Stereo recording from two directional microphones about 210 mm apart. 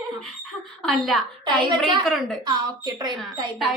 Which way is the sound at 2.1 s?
Centre (ahead or behind).